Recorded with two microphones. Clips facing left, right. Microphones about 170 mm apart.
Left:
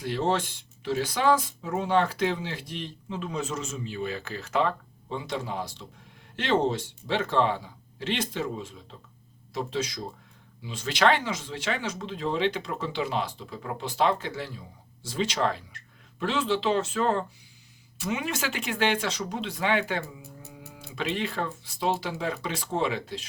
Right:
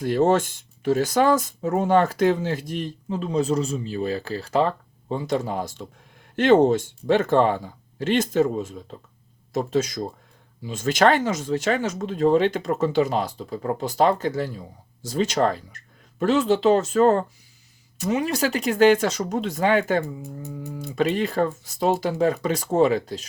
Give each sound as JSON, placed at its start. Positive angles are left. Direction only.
{"t": 0.0, "sound": "speech", "side_deg": -45}